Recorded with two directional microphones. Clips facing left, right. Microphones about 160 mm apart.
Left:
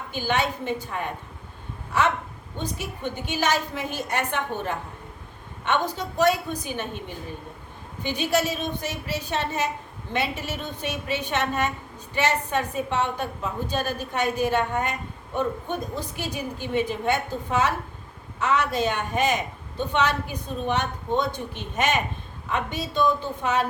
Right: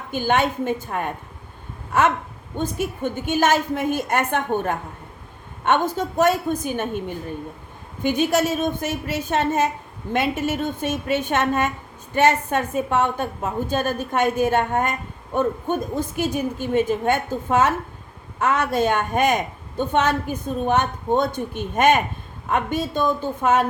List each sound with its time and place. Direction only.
0.1 s a woman's voice: 50° right (ahead or behind)
2.6 s a woman's voice: 50° right (ahead or behind)